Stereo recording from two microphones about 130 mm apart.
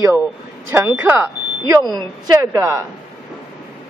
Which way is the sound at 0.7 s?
15° right (ahead or behind).